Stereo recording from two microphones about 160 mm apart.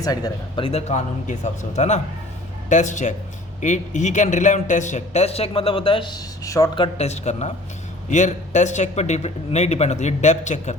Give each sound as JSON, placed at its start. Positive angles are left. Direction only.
{"t": 0.0, "sound": "speech", "side_deg": 25}
{"t": 0.6, "sound": "speech", "side_deg": 40}
{"t": 6.8, "sound": "speech", "side_deg": 40}